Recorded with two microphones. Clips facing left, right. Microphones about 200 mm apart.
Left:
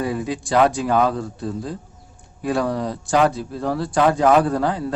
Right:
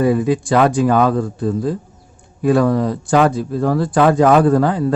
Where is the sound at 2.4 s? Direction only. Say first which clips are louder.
Right 7 dB; 55° right (ahead or behind).